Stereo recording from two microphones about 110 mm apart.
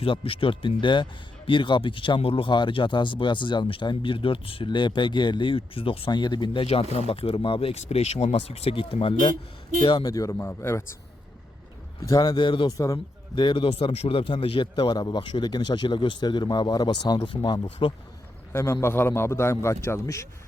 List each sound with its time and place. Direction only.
0.0 s speech: 55° left (ahead or behind)
8.8 s speech: 55° left (ahead or behind)
9.8 s speech: 40° left (ahead or behind)
10.3 s a man's voice: 20° left (ahead or behind)
12.0 s speech: 35° left (ahead or behind)
13.3 s speech: 45° left (ahead or behind)
18.5 s a man's voice: 25° left (ahead or behind)